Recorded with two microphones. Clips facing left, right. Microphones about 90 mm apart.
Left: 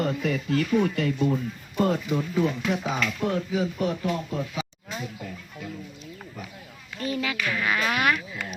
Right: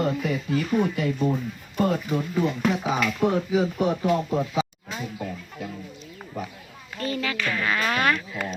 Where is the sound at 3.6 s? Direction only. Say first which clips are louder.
Right 3 dB; 25° right (ahead or behind).